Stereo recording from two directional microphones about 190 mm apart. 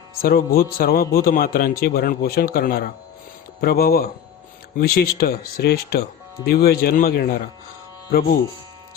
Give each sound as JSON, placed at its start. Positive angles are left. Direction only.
{"t": 0.2, "sound": "a man's voice", "side_deg": 50}